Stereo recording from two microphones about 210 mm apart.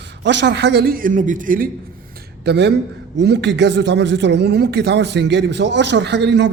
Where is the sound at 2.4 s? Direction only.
50° right (ahead or behind).